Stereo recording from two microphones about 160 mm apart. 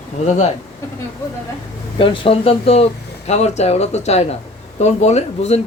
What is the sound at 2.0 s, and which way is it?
Speech, 35° left (ahead or behind).